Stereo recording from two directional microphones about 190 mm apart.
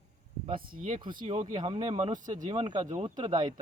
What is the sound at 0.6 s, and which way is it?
Speech, 45° right (ahead or behind).